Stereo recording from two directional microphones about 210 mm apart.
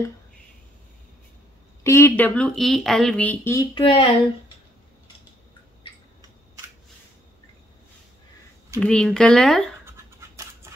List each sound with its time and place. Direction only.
1.8 s speech: 15° left (ahead or behind)
3.7 s speech: 25° left (ahead or behind)
8.7 s speech: 5° left (ahead or behind)
9.8 s scratch: 15° right (ahead or behind)